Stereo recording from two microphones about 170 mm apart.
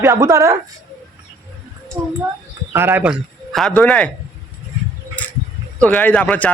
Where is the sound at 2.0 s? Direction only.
25° right (ahead or behind).